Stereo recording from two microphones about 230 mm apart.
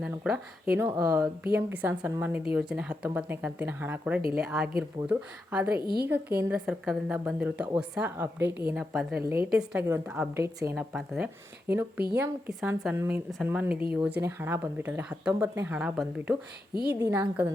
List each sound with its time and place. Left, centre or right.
0.0 s speech: centre
0.9 s a woman's voice: centre
5.6 s a woman's voice: right
6.1 s a woman's voice: centre